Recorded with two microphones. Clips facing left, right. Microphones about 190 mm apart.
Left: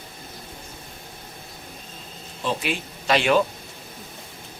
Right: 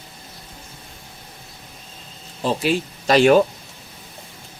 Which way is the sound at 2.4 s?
40° right (ahead or behind).